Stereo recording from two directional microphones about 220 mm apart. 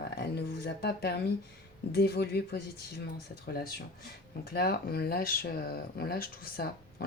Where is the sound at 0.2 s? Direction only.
45° left (ahead or behind).